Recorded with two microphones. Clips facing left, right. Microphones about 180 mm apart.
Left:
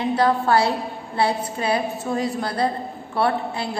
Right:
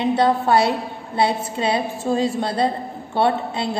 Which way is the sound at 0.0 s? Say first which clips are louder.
Right 2 dB; 20° right (ahead or behind).